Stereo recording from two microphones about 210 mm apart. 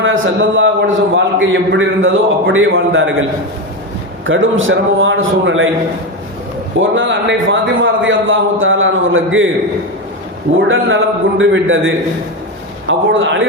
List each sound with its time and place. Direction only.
0.0 s a man's voice: 65° right (ahead or behind)
4.3 s a man's voice: 65° right (ahead or behind)
6.7 s a man's voice: 65° right (ahead or behind)
10.7 s a man's voice: 70° right (ahead or behind)